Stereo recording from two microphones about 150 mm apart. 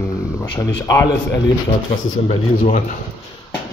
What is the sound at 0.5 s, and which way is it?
Speech, 20° left (ahead or behind).